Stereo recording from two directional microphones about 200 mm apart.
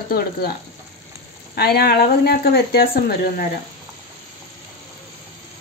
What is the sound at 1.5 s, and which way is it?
Speech, 50° left (ahead or behind).